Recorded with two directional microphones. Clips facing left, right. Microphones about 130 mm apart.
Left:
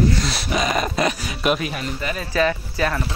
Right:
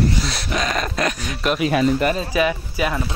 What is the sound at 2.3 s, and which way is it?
Speech, 15° right (ahead or behind).